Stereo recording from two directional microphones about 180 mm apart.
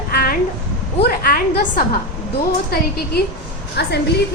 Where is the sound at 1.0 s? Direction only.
55° left (ahead or behind).